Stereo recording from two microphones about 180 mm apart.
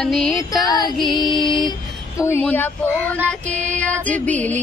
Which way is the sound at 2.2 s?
10° left (ahead or behind).